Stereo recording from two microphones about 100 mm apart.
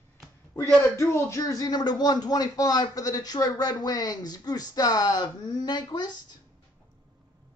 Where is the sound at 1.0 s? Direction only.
25° left (ahead or behind); by 6.2 s 45° left (ahead or behind).